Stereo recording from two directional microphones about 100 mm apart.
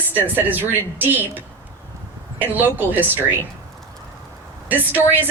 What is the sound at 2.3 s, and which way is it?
Speech, 20° right (ahead or behind).